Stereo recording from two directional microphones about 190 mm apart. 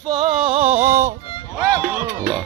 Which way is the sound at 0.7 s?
15° right (ahead or behind).